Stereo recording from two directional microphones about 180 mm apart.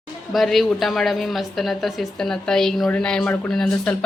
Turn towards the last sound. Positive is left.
turn(degrees=5)  # may be behind; listen again after turning